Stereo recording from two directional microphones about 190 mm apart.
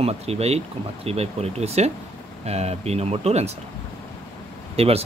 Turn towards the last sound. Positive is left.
turn(degrees=-30)  # may be behind; listen again after turning